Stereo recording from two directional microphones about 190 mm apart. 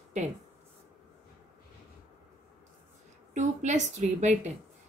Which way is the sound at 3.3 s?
40° right (ahead or behind).